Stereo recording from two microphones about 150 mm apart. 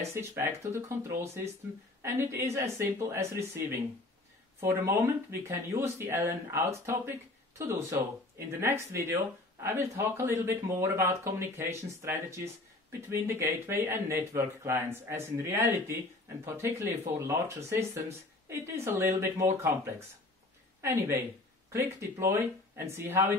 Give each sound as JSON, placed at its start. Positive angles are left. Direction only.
{"t": 0.1, "sound": "speech", "side_deg": -20}